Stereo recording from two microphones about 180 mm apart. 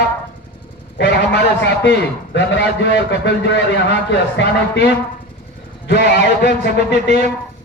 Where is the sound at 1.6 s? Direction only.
80° left.